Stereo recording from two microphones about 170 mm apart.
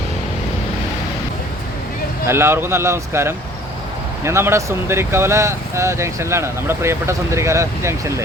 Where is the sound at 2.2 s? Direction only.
15° right (ahead or behind).